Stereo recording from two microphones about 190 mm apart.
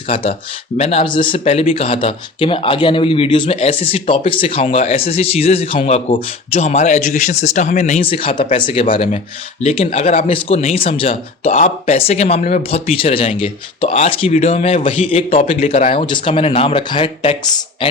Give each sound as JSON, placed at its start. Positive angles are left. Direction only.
{"t": 0.1, "sound": "speech", "side_deg": 30}